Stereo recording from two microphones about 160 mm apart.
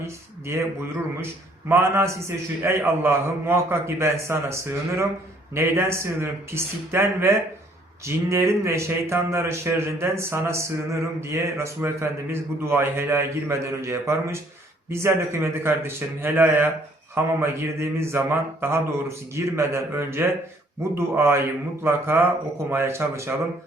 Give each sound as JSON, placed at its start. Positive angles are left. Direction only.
{"t": 0.5, "sound": "speech", "side_deg": -15}